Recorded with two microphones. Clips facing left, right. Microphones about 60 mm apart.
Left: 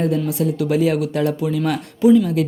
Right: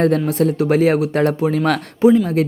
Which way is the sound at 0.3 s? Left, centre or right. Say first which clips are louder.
Right 4 dB; right.